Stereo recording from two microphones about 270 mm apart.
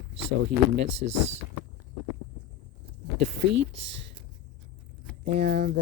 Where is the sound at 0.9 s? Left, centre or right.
Right.